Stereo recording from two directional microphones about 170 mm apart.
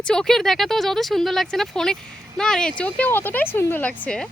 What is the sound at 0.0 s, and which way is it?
Speech, 5° left (ahead or behind).